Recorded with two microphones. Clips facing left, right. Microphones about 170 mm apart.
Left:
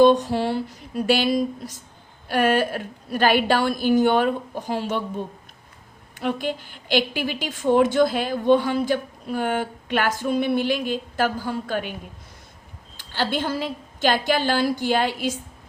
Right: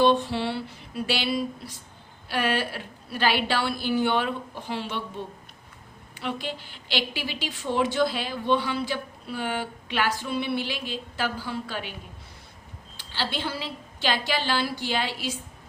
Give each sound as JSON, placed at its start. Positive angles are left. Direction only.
{"t": 0.0, "sound": "a woman's voice", "side_deg": 45}
{"t": 13.0, "sound": "a woman's voice", "side_deg": 50}